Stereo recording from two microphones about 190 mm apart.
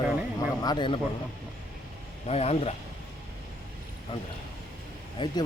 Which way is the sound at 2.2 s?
35° left (ahead or behind).